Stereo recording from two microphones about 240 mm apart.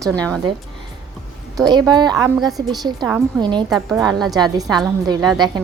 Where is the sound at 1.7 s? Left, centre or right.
Centre.